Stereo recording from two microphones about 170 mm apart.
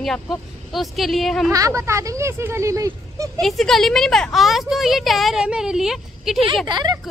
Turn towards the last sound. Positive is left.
turn(degrees=-25)  # may be behind; listen again after turning